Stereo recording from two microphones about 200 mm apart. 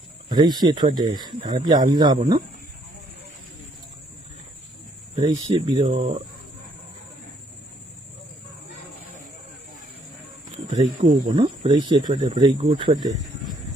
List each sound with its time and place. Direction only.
0.3 s speech: 20° right (ahead or behind)
5.1 s speech: 30° right (ahead or behind)
10.7 s speech: 30° right (ahead or behind)
12.3 s speech: 35° right (ahead or behind)